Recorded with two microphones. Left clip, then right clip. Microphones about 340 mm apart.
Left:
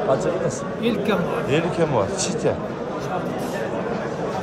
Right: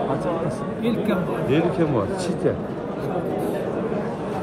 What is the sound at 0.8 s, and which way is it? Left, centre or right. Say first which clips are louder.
Speech: left 2 dB; centre.